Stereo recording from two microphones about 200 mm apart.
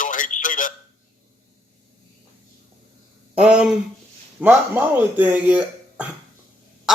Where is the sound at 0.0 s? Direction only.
40° left (ahead or behind).